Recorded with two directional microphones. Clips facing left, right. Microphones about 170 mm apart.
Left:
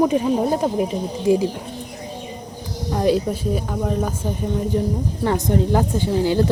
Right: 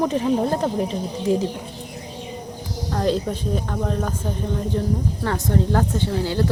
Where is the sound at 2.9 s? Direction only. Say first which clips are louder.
Left 3 dB; 10° left (ahead or behind).